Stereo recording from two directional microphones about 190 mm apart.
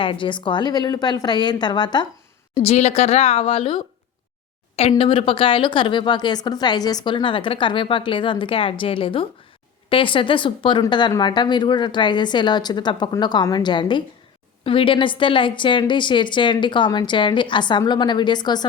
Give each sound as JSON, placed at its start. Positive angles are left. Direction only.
{"t": 0.0, "sound": "a woman's voice", "side_deg": 25}
{"t": 2.6, "sound": "a woman's voice", "side_deg": 35}